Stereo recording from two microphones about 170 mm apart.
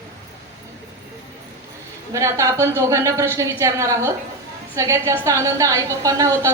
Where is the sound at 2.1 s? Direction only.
20° right (ahead or behind).